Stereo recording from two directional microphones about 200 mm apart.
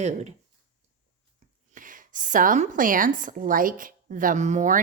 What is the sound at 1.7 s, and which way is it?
A woman's voice, 40° right (ahead or behind).